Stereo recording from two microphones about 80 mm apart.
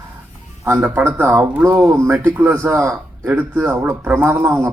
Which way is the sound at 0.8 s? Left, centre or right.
Centre.